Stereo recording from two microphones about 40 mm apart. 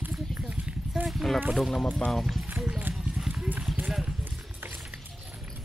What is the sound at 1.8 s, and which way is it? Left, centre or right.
Speech, left.